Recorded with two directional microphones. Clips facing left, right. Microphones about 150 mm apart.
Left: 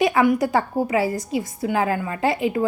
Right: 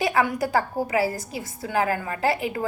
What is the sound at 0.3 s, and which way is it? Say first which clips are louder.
A woman's voice: left 3 dB; 20° left (ahead or behind).